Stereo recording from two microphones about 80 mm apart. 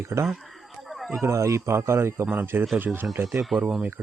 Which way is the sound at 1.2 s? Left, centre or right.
Right.